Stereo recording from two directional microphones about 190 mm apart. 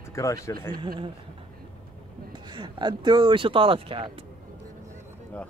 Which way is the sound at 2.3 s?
25° right (ahead or behind).